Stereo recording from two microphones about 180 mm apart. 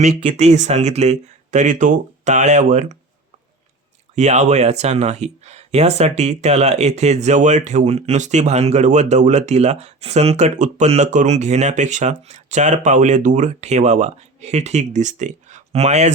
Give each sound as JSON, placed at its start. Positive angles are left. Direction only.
{"t": 0.0, "sound": "speech", "side_deg": -40}
{"t": 4.1, "sound": "speech", "side_deg": -40}